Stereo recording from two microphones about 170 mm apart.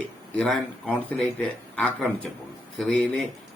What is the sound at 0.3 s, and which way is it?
A man's voice, 5° left (ahead or behind).